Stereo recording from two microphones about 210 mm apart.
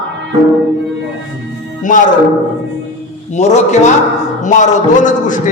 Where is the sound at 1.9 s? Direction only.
40° left (ahead or behind).